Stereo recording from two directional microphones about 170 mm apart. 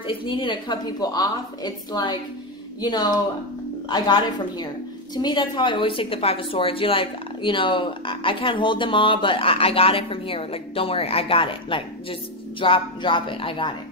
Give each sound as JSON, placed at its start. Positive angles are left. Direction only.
{"t": 0.0, "sound": "a woman's voice", "side_deg": 30}